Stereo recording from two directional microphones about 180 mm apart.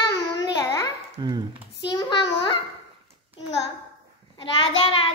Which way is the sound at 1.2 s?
25° right (ahead or behind).